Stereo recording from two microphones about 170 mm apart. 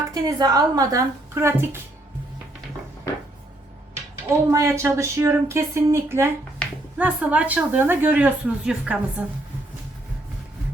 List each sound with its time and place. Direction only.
0.1 s speech: 20° right (ahead or behind)
4.3 s speech: 15° right (ahead or behind)